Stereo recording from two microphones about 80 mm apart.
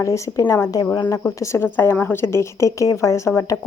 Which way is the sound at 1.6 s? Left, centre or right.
Left.